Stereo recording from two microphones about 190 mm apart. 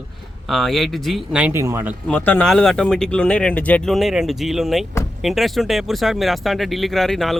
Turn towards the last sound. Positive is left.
turn(degrees=0)  # may be behind; listen again after turning